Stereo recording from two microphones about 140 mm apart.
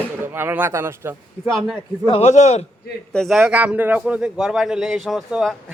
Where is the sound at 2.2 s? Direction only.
55° left (ahead or behind).